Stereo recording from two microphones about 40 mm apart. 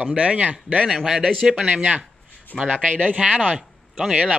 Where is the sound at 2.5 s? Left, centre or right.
Centre.